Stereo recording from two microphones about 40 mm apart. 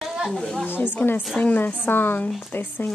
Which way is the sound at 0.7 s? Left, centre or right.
Left.